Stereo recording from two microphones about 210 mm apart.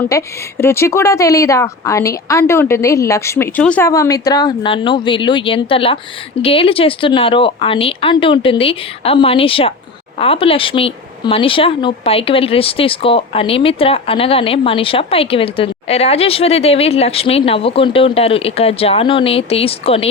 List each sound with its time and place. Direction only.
0.1 s speech: 15° left (ahead or behind)